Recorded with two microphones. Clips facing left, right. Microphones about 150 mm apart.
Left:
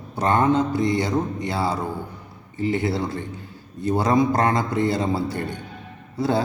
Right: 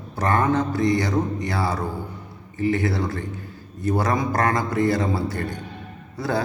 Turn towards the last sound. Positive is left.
turn(degrees=25)  # may be behind; listen again after turning